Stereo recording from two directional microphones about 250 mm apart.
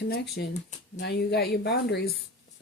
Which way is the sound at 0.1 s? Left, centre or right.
Left.